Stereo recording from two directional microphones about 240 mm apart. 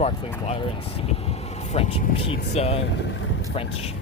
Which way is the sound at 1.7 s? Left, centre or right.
Left.